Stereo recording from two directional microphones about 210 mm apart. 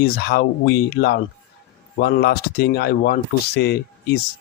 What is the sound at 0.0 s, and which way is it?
Speech, 50° left (ahead or behind).